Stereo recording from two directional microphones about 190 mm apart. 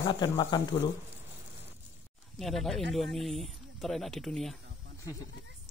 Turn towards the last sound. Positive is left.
turn(degrees=0)  # may be behind; listen again after turning